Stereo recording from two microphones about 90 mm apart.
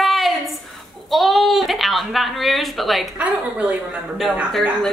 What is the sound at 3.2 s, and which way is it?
Speech, 15° right (ahead or behind).